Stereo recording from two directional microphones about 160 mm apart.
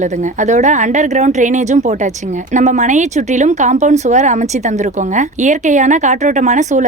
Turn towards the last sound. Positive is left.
turn(degrees=-50)  # may be behind; listen again after turning